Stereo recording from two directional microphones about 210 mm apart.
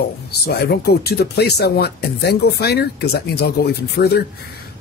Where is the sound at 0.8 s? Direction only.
50° left (ahead or behind).